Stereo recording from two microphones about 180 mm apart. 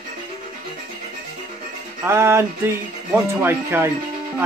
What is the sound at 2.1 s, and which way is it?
A man's voice, 15° right (ahead or behind).